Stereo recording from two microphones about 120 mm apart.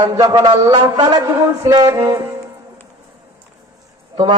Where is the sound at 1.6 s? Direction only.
30° right (ahead or behind).